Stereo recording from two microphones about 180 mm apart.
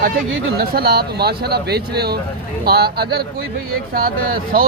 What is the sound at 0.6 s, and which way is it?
Speech, 55° right (ahead or behind).